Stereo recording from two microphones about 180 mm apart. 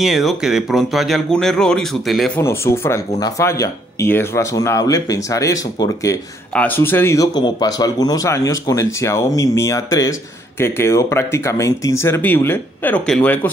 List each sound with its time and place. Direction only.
0.0 s speech: centre (ahead or behind)